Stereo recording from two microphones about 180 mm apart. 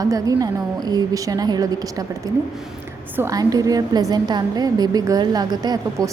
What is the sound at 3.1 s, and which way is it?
A woman's voice, 20° right (ahead or behind).